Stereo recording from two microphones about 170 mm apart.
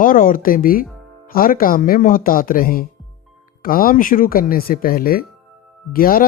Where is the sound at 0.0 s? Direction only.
55° left (ahead or behind).